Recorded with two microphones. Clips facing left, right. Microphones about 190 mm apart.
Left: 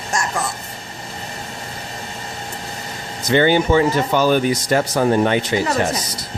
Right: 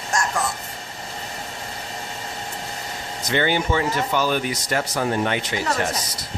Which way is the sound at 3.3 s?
35° left (ahead or behind).